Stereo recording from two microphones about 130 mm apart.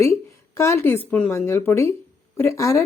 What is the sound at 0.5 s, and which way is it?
A woman's voice, 20° left (ahead or behind).